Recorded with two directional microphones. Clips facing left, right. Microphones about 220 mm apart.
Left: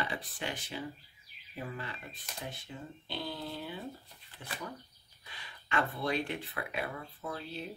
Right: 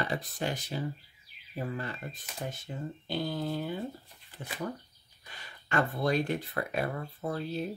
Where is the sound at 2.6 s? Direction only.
45° right (ahead or behind).